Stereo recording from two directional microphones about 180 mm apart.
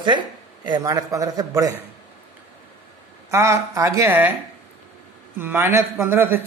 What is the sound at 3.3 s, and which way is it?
Speech, 15° right (ahead or behind).